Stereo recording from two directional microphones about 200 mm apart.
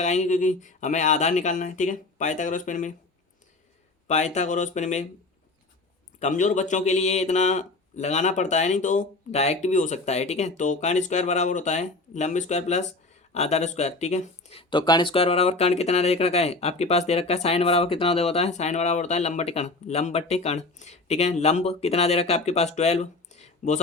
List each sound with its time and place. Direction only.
0.0 s speech: 35° left (ahead or behind)
4.1 s speech: 35° left (ahead or behind)
6.1 s speech: 40° left (ahead or behind)